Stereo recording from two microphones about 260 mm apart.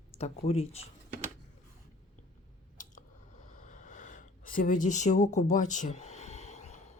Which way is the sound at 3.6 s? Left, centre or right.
Left.